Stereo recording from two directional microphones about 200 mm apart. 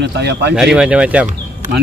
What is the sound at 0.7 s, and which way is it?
Speech, 5° right (ahead or behind).